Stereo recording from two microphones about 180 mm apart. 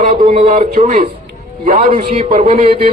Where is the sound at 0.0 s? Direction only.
45° right (ahead or behind).